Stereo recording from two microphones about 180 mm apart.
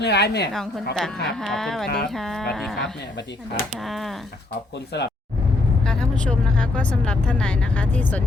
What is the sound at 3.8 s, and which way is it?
Speech, centre (ahead or behind).